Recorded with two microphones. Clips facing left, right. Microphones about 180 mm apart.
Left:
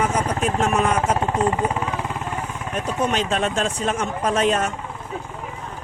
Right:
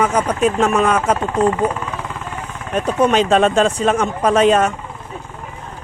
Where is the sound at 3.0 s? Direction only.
80° right.